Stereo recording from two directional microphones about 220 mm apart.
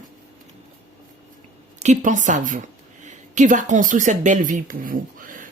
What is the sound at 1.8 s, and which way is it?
Speech, 35° right (ahead or behind).